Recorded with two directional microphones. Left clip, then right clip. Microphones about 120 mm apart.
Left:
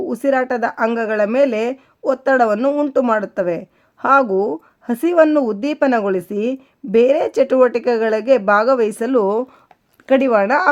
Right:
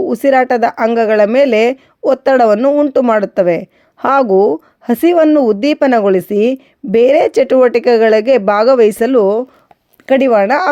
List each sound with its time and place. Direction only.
0.0 s a woman's voice: 35° right (ahead or behind)
2.6 s speech: 20° right (ahead or behind)
3.1 s a woman's voice: 40° right (ahead or behind)